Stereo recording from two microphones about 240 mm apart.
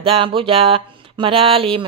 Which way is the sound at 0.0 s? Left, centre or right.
Right.